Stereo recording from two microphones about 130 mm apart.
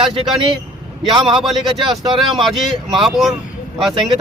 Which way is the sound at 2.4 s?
Centre (ahead or behind).